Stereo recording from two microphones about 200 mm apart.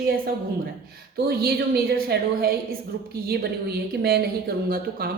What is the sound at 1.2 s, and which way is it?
Speech, 50° right (ahead or behind).